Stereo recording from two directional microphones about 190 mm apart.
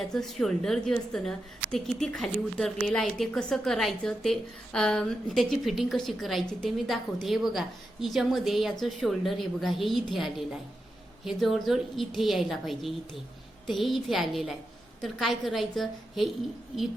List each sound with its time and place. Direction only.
0.1 s a woman's voice: centre (ahead or behind)